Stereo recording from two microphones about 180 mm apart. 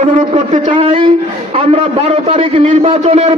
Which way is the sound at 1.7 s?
35° right (ahead or behind).